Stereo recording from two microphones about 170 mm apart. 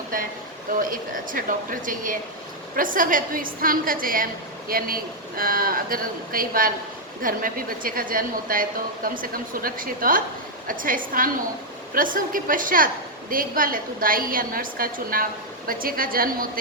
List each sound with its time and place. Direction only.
0.8 s a woman's voice: 55° right (ahead or behind)